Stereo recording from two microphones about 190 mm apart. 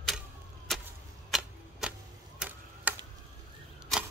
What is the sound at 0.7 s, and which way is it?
Clang, centre (ahead or behind).